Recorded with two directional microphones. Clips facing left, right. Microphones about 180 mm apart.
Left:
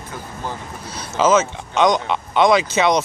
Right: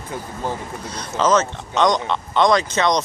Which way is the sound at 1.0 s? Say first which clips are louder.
Left 2 dB; 5° left (ahead or behind).